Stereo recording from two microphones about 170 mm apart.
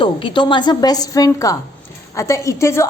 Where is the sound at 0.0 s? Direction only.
30° left (ahead or behind).